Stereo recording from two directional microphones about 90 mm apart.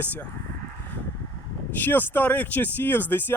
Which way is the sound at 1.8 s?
20° left (ahead or behind).